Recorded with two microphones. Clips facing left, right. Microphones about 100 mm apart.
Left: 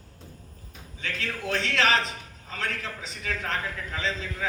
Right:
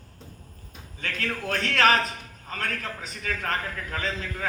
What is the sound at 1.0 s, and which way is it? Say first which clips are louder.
A man's voice: right 2 dB; 50° right (ahead or behind).